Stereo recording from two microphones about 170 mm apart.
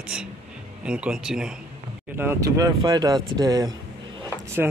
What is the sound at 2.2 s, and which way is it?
Speech, 15° right (ahead or behind).